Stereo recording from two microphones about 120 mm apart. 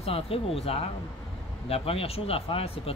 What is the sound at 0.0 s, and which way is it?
Speech, 55° left (ahead or behind).